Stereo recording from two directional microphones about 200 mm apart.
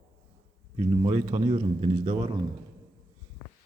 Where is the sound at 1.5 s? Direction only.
30° right (ahead or behind).